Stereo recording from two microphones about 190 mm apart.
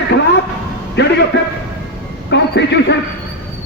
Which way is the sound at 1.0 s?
65° left (ahead or behind).